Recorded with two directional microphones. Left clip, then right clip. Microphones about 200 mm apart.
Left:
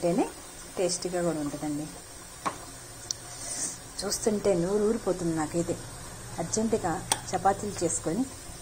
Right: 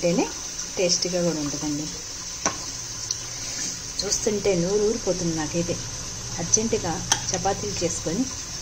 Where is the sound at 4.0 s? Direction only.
10° left (ahead or behind).